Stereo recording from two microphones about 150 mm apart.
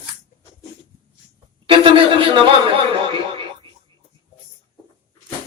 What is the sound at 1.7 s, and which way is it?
A man's voice, 35° right (ahead or behind).